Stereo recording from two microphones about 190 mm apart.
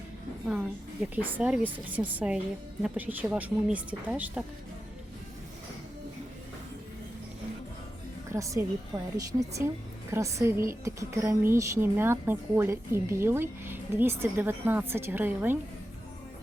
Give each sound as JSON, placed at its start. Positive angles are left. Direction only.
{"t": 0.4, "sound": "a woman's voice", "side_deg": -5}
{"t": 8.3, "sound": "a woman's voice", "side_deg": -15}